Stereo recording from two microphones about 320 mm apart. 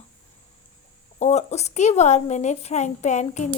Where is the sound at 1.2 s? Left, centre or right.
Left.